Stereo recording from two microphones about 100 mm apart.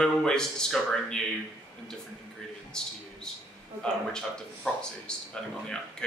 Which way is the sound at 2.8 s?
5° left (ahead or behind).